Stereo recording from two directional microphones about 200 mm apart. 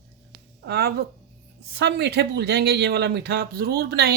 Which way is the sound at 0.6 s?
55° right (ahead or behind).